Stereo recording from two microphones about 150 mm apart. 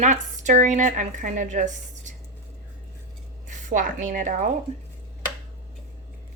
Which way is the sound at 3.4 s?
55° right (ahead or behind).